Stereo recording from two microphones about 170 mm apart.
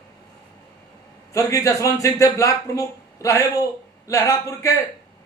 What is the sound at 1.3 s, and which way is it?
A man's voice, 20° left (ahead or behind).